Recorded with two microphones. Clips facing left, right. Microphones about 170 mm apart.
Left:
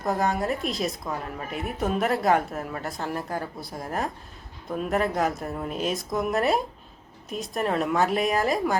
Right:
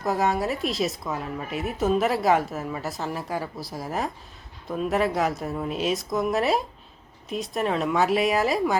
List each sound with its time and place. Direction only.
0.0 s speech: centre (ahead or behind)